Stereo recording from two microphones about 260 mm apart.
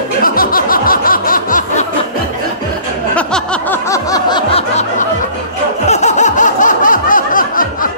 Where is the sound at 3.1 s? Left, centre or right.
Centre; by 5.0 s left.